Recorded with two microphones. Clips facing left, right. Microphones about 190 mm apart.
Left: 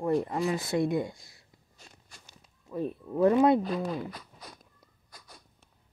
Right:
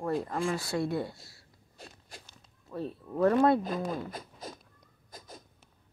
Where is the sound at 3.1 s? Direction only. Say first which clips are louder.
Left 2 dB; 10° left (ahead or behind).